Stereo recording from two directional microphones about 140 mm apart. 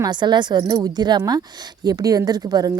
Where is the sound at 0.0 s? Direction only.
30° right (ahead or behind).